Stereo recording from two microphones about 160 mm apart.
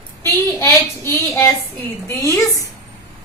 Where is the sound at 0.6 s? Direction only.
15° left (ahead or behind).